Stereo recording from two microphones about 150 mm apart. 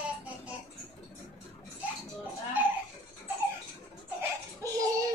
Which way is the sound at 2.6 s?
10° right (ahead or behind).